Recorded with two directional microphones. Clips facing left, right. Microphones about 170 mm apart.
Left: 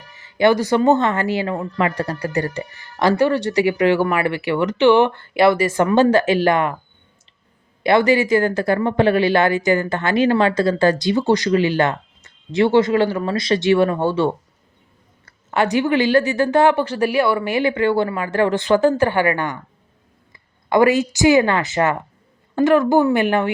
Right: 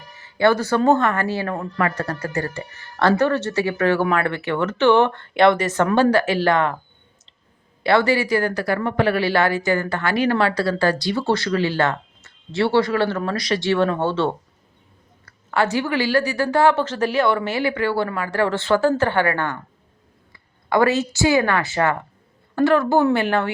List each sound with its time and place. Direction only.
0.2 s speech: 15° left (ahead or behind)
6.0 s speech: 20° left (ahead or behind)
7.9 s speech: 15° left (ahead or behind)
13.3 s speech: 25° left (ahead or behind)
13.7 s speech: 15° left (ahead or behind)
15.4 s a woman's voice: 20° left (ahead or behind)